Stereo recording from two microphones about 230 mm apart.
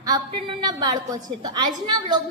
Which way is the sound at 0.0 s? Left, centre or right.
Centre.